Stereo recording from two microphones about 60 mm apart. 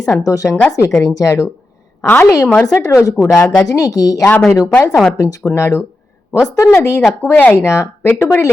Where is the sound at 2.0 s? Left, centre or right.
Left.